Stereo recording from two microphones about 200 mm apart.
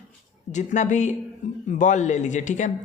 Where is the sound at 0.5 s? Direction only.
35° left (ahead or behind).